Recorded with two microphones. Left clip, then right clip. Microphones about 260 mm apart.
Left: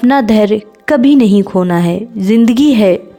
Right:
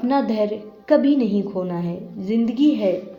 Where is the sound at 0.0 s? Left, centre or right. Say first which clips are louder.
Left 10 dB; left.